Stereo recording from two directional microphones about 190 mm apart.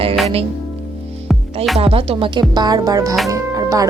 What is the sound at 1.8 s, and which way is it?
Music, 30° right (ahead or behind).